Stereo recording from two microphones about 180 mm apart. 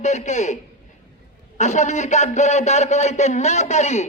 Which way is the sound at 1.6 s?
40° left (ahead or behind).